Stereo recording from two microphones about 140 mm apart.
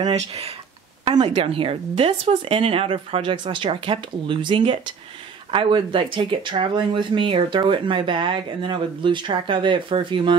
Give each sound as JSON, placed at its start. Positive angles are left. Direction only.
{"t": 0.0, "sound": "speech", "side_deg": -50}